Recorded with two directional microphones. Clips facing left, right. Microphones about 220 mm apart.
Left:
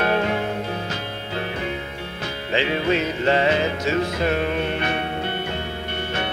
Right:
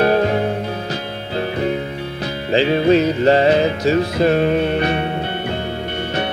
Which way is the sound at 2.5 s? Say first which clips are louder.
Right 8 dB; 35° right (ahead or behind).